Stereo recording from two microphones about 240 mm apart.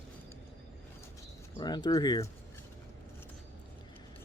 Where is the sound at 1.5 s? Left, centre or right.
Centre.